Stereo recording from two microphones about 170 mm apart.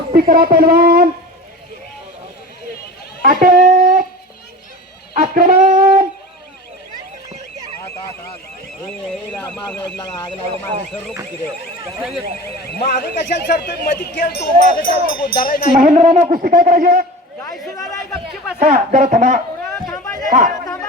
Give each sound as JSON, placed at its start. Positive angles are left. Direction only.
{"t": 0.1, "sound": "speech", "side_deg": -60}
{"t": 3.2, "sound": "speech", "side_deg": -55}
{"t": 5.1, "sound": "speech", "side_deg": -55}
{"t": 5.8, "sound": "dog", "side_deg": -55}
{"t": 9.0, "sound": "speech", "side_deg": 5}
{"t": 12.6, "sound": "speech", "side_deg": 70}
{"t": 15.8, "sound": "speech", "side_deg": -45}
{"t": 16.3, "sound": "speech", "side_deg": -55}
{"t": 17.7, "sound": "a sound", "side_deg": 20}
{"t": 18.6, "sound": "speech", "side_deg": -50}
{"t": 19.6, "sound": "a sound", "side_deg": 15}
{"t": 20.2, "sound": "speech", "side_deg": -45}